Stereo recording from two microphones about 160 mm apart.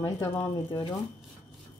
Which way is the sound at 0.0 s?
20° left (ahead or behind).